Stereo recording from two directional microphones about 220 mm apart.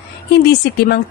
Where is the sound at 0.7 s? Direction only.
50° left (ahead or behind).